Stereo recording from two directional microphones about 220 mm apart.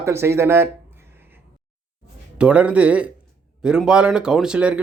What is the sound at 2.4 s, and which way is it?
A man's voice, 5° right (ahead or behind).